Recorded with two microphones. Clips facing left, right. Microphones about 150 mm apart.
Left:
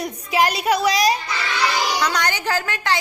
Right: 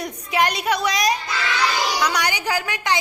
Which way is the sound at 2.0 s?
10° right (ahead or behind).